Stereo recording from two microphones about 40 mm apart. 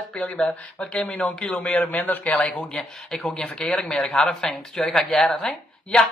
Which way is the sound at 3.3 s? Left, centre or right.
Left.